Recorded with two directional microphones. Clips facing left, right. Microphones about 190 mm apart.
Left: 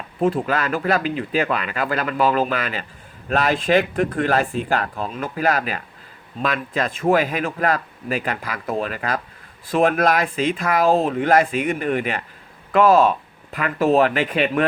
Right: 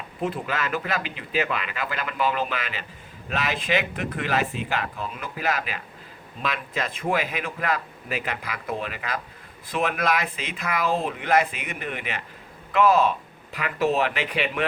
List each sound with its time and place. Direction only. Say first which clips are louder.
0.2 s a man's voice: left 8 dB; 45° left (ahead or behind)